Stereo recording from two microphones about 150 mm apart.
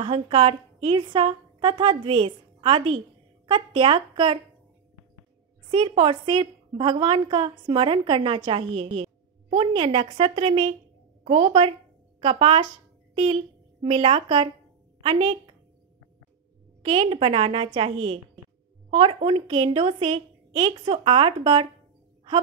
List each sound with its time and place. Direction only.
0.0 s a woman's voice: 35° right (ahead or behind)
5.7 s a woman's voice: 35° right (ahead or behind)
16.8 s a woman's voice: 35° right (ahead or behind)